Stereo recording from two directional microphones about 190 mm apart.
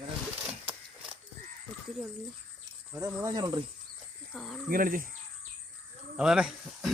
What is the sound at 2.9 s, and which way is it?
Speech, 15° right (ahead or behind).